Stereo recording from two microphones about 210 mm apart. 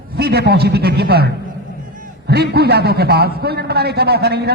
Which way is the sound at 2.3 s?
50° right (ahead or behind).